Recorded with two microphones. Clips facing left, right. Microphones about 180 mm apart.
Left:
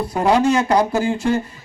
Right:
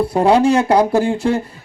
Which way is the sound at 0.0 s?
30° right (ahead or behind).